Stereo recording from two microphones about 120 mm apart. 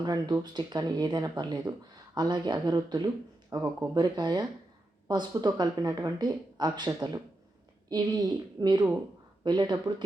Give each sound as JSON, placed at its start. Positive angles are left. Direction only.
{"t": 0.0, "sound": "speech", "side_deg": -35}